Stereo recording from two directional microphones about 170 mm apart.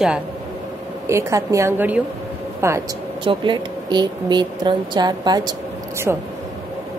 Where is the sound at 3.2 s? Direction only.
30° right (ahead or behind).